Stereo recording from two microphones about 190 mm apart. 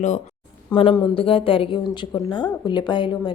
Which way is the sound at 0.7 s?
25° left (ahead or behind).